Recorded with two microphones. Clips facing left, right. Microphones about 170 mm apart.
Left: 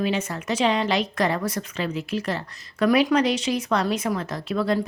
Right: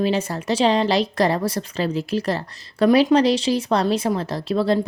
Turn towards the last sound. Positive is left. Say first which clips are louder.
# right 4 dB
turn(degrees=-30)  # may be behind; listen again after turning